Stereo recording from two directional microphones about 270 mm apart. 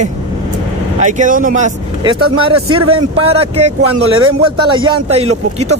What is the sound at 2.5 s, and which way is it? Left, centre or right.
Speech, right.